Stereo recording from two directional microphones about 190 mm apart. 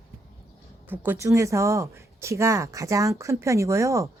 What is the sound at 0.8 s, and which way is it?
Speech, 10° right (ahead or behind).